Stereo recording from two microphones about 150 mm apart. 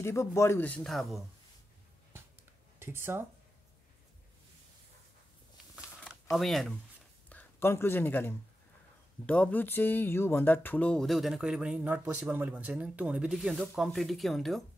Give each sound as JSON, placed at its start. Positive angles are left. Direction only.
{"t": 0.0, "sound": "a man's voice", "side_deg": 20}
{"t": 2.8, "sound": "speech", "side_deg": -15}
{"t": 6.3, "sound": "speech", "side_deg": 0}
{"t": 7.2, "sound": "speech", "side_deg": 15}